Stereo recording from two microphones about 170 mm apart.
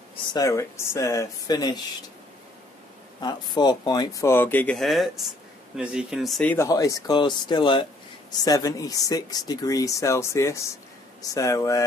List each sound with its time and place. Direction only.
0.3 s speech: 20° left (ahead or behind)
3.2 s speech: 25° left (ahead or behind); by 6.5 s centre (ahead or behind)
6.5 s speech: 20° left (ahead or behind)